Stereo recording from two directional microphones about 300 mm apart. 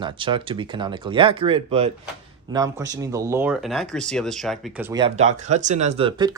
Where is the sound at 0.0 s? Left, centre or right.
Centre.